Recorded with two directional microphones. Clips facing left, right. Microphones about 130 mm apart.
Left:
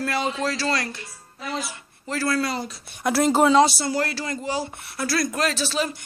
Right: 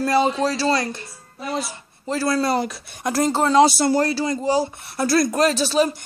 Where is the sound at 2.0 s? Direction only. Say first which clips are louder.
Right 3 dB; 15° right (ahead or behind).